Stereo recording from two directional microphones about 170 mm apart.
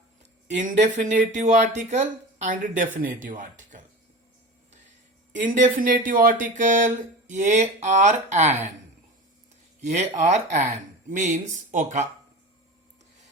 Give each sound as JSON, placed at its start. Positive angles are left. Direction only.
{"t": 0.2, "sound": "speech", "side_deg": -45}
{"t": 5.5, "sound": "speech", "side_deg": -50}
{"t": 10.2, "sound": "speech", "side_deg": -45}